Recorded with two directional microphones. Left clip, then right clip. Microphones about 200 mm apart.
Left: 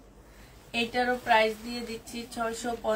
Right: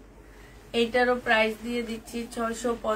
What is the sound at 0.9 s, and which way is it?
A woman's voice, 25° right (ahead or behind).